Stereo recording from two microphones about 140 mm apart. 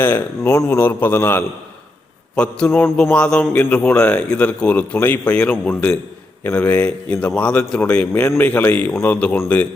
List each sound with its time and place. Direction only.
0.0 s speech: 15° left (ahead or behind)